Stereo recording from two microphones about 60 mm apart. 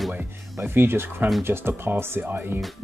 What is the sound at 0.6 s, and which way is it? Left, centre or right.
Speech, right.